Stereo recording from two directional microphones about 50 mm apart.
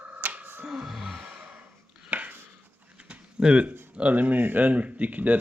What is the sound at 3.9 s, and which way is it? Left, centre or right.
Speech, right.